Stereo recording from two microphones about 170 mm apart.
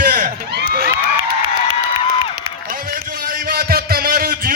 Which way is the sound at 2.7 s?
55° right (ahead or behind).